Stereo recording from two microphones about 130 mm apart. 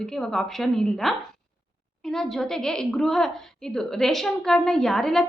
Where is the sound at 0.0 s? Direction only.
5° left (ahead or behind).